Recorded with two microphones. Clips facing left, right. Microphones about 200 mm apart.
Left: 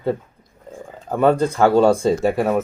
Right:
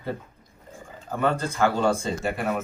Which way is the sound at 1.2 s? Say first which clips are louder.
Left 8 dB; 45° left (ahead or behind).